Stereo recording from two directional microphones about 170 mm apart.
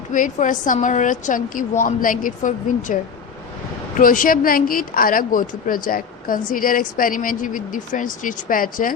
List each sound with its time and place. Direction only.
0.1 s a woman's voice: 50° left (ahead or behind)
4.0 s a woman's voice: 55° left (ahead or behind)